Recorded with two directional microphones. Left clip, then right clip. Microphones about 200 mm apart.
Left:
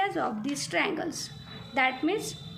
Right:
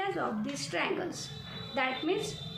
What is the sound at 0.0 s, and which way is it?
A woman's voice, 45° left (ahead or behind).